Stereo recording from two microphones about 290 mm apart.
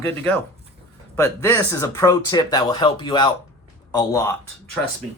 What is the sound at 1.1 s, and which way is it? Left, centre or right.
Speech, centre.